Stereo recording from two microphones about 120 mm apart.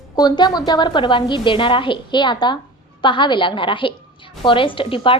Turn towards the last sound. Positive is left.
turn(degrees=45)  # may be behind; listen again after turning